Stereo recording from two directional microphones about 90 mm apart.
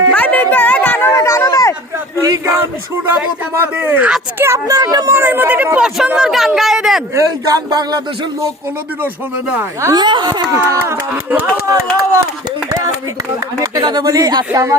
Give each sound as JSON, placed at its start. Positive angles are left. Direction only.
{"t": 0.1, "sound": "a sound", "side_deg": 15}
{"t": 1.1, "sound": "a sound", "side_deg": 35}
{"t": 3.5, "sound": "speech", "side_deg": -25}
{"t": 5.1, "sound": "speech", "side_deg": -25}
{"t": 5.7, "sound": "speech", "side_deg": -10}
{"t": 7.1, "sound": "speech", "side_deg": -40}
{"t": 9.9, "sound": "speech", "side_deg": -55}
{"t": 10.5, "sound": "speech", "side_deg": -30}
{"t": 14.0, "sound": "speech", "side_deg": -35}